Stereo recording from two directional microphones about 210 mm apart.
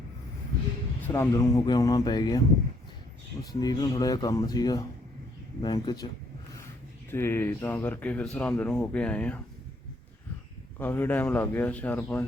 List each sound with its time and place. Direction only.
1.0 s speech: 10° left (ahead or behind)
3.5 s speech: 20° left (ahead or behind)
7.1 s speech: 10° left (ahead or behind)
10.8 s speech: 10° left (ahead or behind)